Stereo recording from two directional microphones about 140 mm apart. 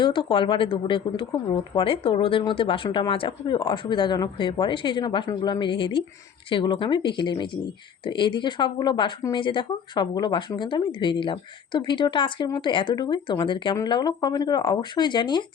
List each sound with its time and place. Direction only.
0.0 s speech: 35° left (ahead or behind)